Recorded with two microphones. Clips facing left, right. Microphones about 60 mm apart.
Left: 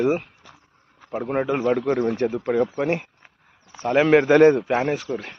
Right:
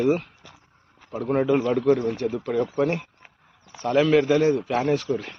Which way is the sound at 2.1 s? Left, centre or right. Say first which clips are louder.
Left 3 dB; left.